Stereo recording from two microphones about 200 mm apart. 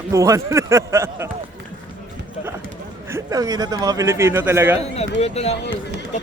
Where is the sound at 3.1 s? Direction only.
20° right (ahead or behind).